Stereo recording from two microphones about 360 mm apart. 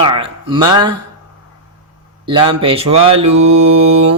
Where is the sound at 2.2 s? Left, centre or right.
Centre.